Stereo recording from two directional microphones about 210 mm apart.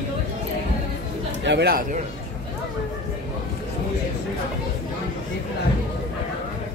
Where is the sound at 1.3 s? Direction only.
55° right (ahead or behind).